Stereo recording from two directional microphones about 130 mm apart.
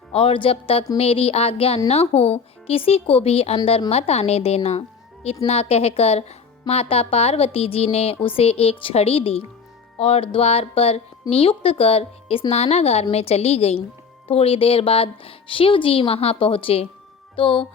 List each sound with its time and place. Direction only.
0.1 s speech: 45° left (ahead or behind)